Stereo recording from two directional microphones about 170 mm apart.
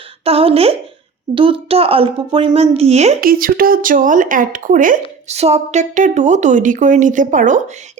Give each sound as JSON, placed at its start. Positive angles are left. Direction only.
{"t": 0.3, "sound": "a woman's voice", "side_deg": -35}
{"t": 3.2, "sound": "speech", "side_deg": -60}